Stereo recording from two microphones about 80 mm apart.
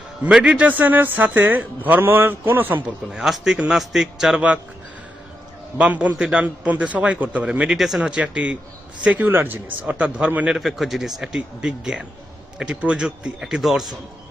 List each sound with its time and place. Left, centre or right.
0.3 s a man's voice: centre
3.1 s speech: centre
4.4 s a man's voice: centre
5.7 s a man's voice: centre
7.8 s speech: centre
8.0 s a man's voice: centre
10.6 s a man's voice: centre